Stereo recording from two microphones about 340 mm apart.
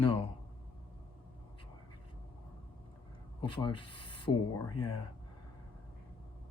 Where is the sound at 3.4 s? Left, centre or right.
Centre.